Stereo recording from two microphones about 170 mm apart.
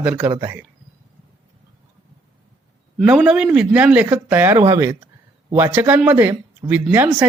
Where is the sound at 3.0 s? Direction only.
5° right (ahead or behind).